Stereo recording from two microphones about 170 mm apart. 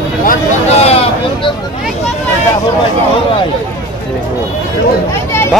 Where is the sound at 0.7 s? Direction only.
35° left (ahead or behind).